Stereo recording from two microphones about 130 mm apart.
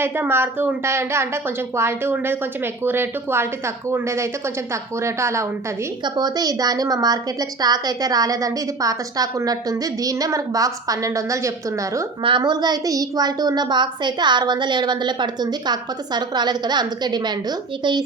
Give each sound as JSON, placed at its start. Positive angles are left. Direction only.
{"t": 0.0, "sound": "a woman's voice", "side_deg": -15}
{"t": 12.2, "sound": "a woman's voice", "side_deg": -35}